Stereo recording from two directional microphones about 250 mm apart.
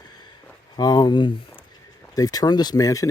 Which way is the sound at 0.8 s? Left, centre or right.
Centre.